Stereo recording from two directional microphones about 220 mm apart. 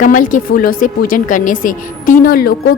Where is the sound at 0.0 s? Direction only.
35° left (ahead or behind).